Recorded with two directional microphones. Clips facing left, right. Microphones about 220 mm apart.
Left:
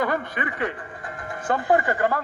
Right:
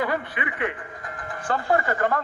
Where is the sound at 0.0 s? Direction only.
45° left (ahead or behind).